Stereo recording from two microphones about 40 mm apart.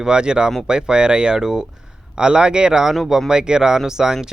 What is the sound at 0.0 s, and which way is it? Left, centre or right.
Speech, right.